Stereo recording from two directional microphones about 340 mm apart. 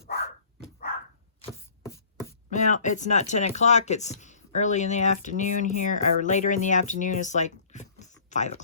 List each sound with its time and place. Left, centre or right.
2.5 s speech: left